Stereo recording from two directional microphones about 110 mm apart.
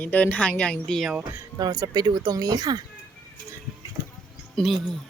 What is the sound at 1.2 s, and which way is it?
Speech, 35° right (ahead or behind).